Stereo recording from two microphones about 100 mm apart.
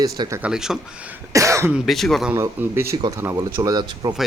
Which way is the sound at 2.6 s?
25° right (ahead or behind).